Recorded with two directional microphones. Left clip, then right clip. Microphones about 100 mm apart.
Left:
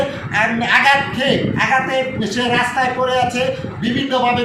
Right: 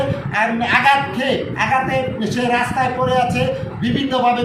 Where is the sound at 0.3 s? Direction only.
10° left (ahead or behind).